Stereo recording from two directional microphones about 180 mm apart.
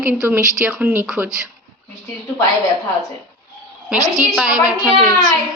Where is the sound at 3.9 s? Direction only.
20° left (ahead or behind).